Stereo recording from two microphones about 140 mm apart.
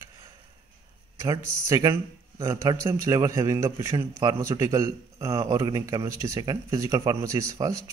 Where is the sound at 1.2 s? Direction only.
25° right (ahead or behind).